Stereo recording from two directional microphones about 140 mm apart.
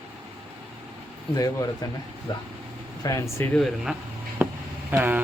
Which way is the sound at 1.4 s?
25° left (ahead or behind).